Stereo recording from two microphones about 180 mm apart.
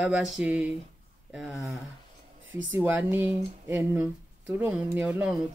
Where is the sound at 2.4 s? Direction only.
90° right.